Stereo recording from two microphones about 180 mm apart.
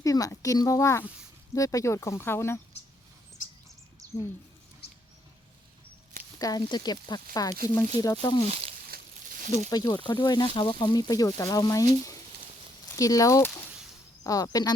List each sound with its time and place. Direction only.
0.0 s speech: 20° left (ahead or behind)
3.4 s bird: 45° left (ahead or behind)
4.0 s bird: 20° right (ahead or behind)
4.8 s rodents: 65° left (ahead or behind)
6.4 s speech: 20° left (ahead or behind)
8.4 s speech: 35° right (ahead or behind)
8.9 s a sound: 50° right (ahead or behind)
9.6 s speech: 20° left (ahead or behind)
13.0 s speech: 20° left (ahead or behind)